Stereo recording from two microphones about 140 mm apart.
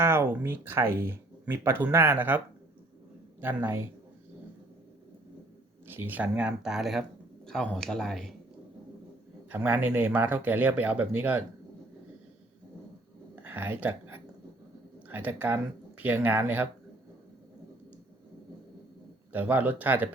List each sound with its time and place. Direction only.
0.0 s speech: 15° right (ahead or behind)
3.4 s speech: 15° right (ahead or behind)
5.9 s speech: 15° right (ahead or behind); by 8.4 s centre (ahead or behind)
9.6 s speech: 15° right (ahead or behind)
13.4 s a sound: 10° right (ahead or behind)
15.1 s speech: 10° right (ahead or behind)
19.3 s speech: 10° right (ahead or behind)